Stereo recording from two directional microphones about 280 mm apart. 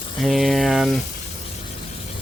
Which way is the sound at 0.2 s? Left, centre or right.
Centre.